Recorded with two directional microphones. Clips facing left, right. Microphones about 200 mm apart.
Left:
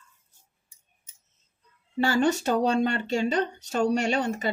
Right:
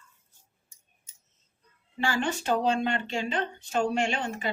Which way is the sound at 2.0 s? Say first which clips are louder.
Left 5 dB; 40° left (ahead or behind).